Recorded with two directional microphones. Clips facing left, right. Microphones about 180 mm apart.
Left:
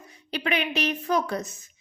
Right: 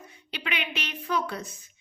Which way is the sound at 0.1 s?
40° left (ahead or behind).